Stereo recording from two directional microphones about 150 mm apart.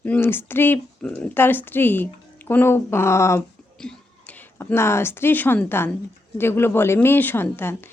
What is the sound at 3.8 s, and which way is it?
A woman's voice, 5° left (ahead or behind).